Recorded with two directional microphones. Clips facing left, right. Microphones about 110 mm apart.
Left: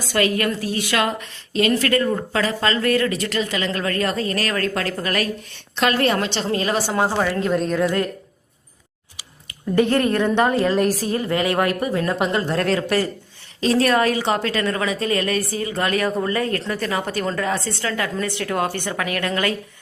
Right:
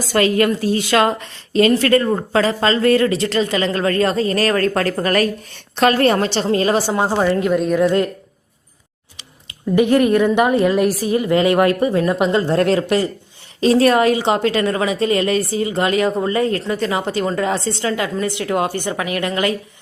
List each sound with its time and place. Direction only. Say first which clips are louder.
0.1 s a woman's voice: right 5 dB; 30° right (ahead or behind); by 7.8 s 5° right (ahead or behind)
7.8 s a woman's voice: right 5 dB; 20° right (ahead or behind)
9.7 s a woman's voice: right 4 dB; 15° right (ahead or behind)